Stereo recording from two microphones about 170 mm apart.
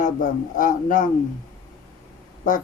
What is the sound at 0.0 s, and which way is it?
Speech, 50° left (ahead or behind).